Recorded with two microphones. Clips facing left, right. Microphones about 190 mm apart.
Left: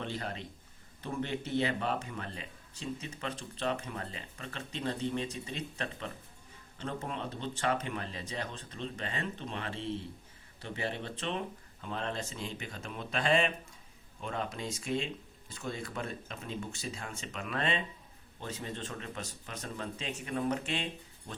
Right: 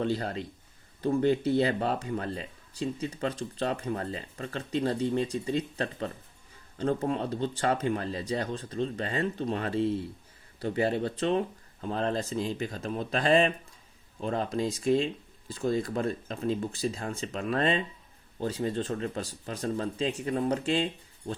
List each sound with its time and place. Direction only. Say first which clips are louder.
0.0 s speech: right 9 dB; 35° right (ahead or behind)